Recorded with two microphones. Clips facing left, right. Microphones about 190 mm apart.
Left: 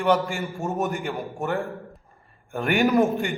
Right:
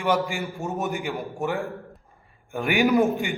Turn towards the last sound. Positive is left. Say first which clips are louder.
# even
turn(degrees=0)  # may be behind; listen again after turning